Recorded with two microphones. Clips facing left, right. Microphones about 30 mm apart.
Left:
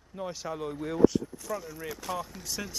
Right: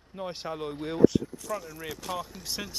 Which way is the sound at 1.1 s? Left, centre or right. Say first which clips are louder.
Right 2 dB; centre.